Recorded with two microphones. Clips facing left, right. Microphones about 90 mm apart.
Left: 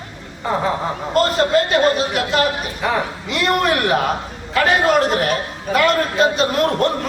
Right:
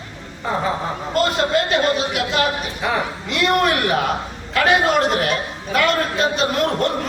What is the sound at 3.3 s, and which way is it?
A man's voice, centre (ahead or behind).